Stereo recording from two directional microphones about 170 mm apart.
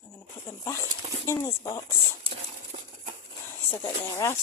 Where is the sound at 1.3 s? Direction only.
15° left (ahead or behind).